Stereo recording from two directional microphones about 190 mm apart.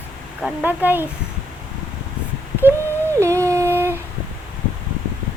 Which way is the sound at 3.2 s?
15° right (ahead or behind).